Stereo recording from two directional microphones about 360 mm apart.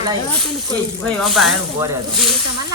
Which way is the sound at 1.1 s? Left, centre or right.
Centre.